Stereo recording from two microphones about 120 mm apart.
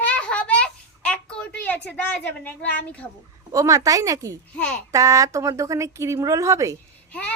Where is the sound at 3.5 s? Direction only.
30° right (ahead or behind).